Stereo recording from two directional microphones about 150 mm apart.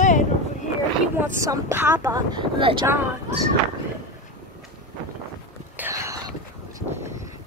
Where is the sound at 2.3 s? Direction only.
35° right (ahead or behind).